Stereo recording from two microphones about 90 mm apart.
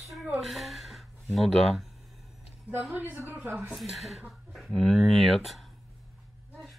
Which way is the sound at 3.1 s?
20° right (ahead or behind).